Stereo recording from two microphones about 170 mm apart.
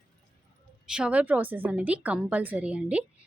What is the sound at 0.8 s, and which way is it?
A woman's voice, 5° right (ahead or behind).